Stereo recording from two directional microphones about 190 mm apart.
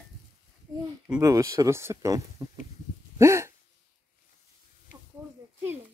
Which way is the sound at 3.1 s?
15° right (ahead or behind).